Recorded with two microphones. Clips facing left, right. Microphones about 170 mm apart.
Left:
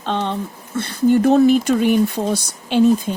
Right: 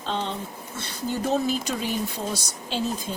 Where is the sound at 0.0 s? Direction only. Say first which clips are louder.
Left 7 dB; 65° left (ahead or behind).